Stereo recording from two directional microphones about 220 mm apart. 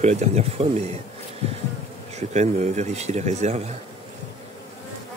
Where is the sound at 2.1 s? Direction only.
30° right (ahead or behind).